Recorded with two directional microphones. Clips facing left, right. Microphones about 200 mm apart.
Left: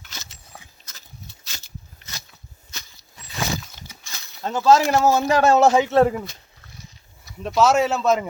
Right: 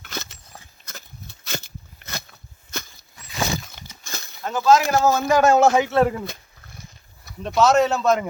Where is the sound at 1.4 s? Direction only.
55° right (ahead or behind).